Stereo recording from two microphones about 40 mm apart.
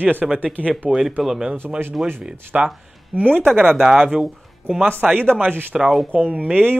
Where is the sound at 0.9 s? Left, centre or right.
Centre.